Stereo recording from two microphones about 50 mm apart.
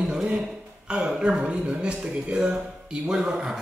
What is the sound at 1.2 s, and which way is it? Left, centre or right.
Speech, right.